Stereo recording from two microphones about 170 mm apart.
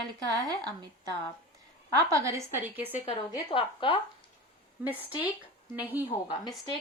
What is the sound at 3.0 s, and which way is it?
Speech, 30° left (ahead or behind).